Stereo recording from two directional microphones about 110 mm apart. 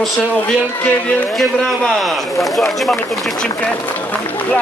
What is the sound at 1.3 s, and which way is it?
A man's voice, centre (ahead or behind).